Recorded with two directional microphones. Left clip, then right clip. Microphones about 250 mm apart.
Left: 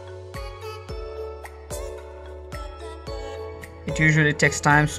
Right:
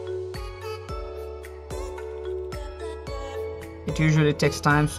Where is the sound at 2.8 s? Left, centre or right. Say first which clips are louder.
Right 1 dB; centre.